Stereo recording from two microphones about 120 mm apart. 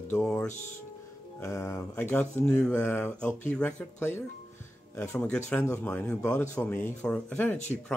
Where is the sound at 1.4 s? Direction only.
25° left (ahead or behind).